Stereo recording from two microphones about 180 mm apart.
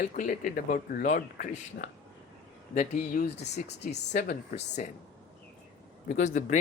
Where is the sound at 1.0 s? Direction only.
45° left (ahead or behind).